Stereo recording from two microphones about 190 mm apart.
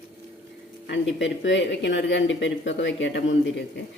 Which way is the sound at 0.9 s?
70° left (ahead or behind).